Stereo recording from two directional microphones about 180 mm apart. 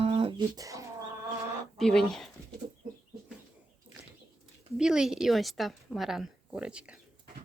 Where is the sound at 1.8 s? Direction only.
Centre (ahead or behind).